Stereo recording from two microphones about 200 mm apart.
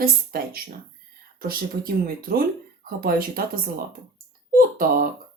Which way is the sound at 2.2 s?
45° right (ahead or behind).